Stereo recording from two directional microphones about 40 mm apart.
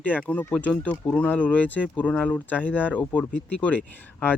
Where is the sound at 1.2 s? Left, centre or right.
Left.